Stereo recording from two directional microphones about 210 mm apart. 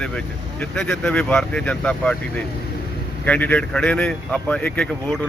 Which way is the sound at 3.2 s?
5° left (ahead or behind).